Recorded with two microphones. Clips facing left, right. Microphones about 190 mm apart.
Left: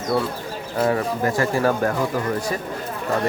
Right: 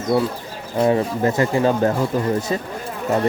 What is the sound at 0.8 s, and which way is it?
Speech, 25° right (ahead or behind).